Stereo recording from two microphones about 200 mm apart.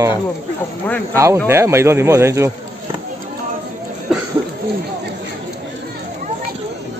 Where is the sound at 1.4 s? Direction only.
10° right (ahead or behind).